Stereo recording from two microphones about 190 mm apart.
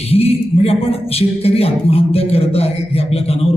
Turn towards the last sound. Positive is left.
turn(degrees=30)  # may be behind; listen again after turning